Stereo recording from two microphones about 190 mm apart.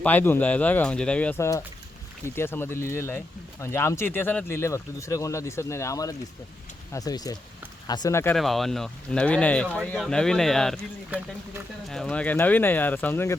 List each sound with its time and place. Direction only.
0.0 s speech: 10° left (ahead or behind)
8.4 s speech: centre (ahead or behind)